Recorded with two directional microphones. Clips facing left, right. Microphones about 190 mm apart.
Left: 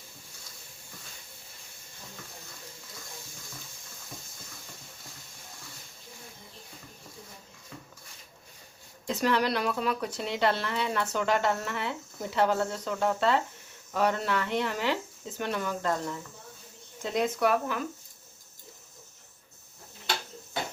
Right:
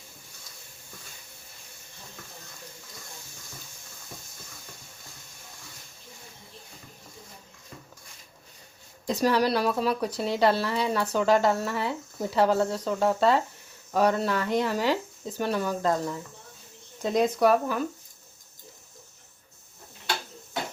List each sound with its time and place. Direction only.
9.0 s speech: 35° right (ahead or behind)
17.0 s speech: 40° right (ahead or behind)